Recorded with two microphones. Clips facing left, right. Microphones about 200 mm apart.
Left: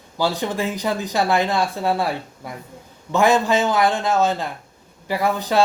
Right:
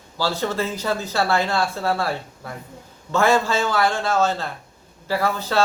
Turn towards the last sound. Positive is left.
turn(degrees=15)  # may be behind; listen again after turning